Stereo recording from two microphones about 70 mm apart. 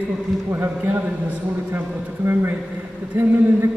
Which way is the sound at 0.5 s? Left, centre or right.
Right.